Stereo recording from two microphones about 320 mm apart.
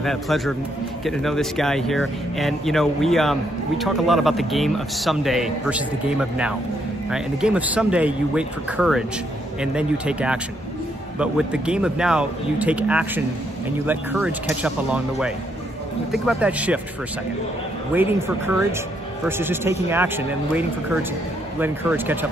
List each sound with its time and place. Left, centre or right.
0.0 s speech: centre
17.9 s speech: centre
19.2 s speech: centre